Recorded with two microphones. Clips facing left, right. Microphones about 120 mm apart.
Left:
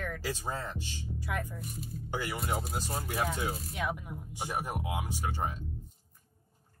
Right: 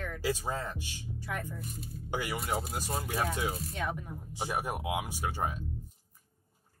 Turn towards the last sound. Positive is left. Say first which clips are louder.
# right 1 dB
turn(degrees=-10)  # may be behind; listen again after turning